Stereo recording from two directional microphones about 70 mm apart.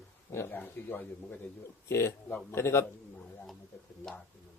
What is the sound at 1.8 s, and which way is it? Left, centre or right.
A man's voice, left.